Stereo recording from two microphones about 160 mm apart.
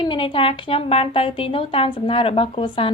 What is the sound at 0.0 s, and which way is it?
Speech, 30° left (ahead or behind).